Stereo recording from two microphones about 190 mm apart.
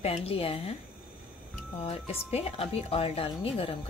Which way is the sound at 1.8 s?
30° left (ahead or behind).